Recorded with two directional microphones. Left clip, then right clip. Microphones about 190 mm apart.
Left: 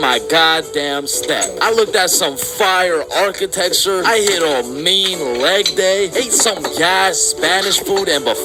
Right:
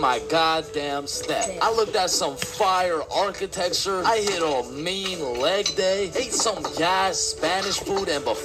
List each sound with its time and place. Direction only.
0.0 s speech: 20° left (ahead or behind)